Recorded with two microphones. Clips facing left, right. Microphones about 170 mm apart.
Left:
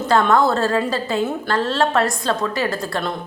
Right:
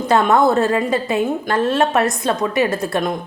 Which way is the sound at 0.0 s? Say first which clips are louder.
Right 2 dB; 20° right (ahead or behind).